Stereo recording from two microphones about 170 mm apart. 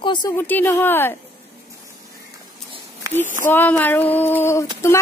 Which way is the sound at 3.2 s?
50° right (ahead or behind).